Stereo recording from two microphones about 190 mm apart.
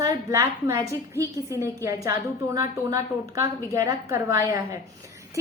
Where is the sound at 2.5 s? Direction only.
15° right (ahead or behind).